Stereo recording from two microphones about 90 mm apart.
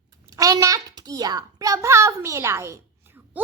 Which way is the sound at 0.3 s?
40° right (ahead or behind).